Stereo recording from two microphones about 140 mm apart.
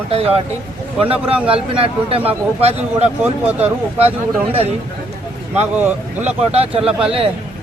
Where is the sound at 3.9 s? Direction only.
45° right (ahead or behind).